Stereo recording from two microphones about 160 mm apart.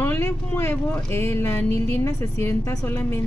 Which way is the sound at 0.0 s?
15° left (ahead or behind).